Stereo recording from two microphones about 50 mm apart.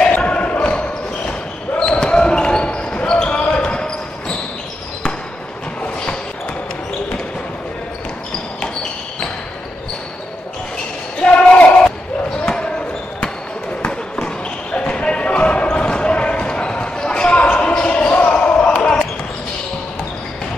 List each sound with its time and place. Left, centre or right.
0.2 s basketball bounce: left
11.1 s basketball bounce: left
14.2 s basketball bounce: left